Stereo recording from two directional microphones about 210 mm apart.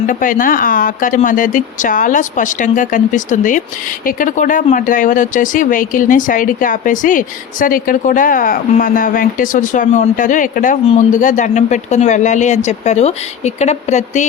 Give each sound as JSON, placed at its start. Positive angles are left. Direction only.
{"t": 0.1, "sound": "speech", "side_deg": 40}